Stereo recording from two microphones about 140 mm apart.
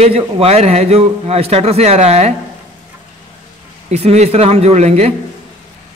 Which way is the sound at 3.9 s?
50° right (ahead or behind).